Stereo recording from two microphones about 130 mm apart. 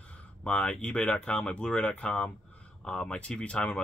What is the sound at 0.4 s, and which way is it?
Speech, 10° left (ahead or behind).